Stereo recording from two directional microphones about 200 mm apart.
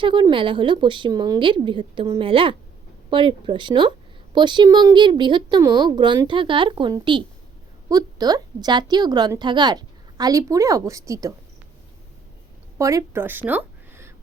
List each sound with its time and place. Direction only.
0.0 s a woman's voice: 25° right (ahead or behind)
12.8 s a woman's voice: 15° right (ahead or behind)